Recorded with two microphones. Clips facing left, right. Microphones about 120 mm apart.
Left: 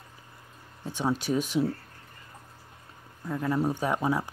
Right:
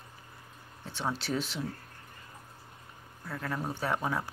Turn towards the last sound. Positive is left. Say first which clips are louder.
# left 5 dB
turn(degrees=15)  # may be behind; listen again after turning